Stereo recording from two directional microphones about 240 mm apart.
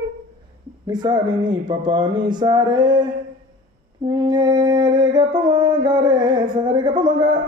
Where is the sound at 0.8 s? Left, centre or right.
Centre.